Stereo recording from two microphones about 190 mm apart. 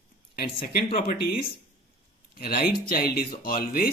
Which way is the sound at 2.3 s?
50° left (ahead or behind).